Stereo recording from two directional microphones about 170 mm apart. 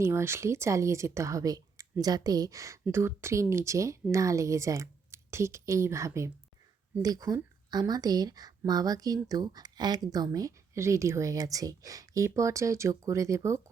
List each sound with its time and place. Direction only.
0.0 s speech: 15° right (ahead or behind)